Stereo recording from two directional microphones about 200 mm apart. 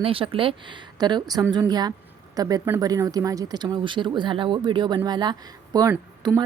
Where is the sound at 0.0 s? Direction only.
25° right (ahead or behind).